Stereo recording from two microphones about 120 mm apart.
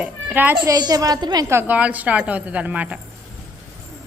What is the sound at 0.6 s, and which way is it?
Speech, 35° right (ahead or behind).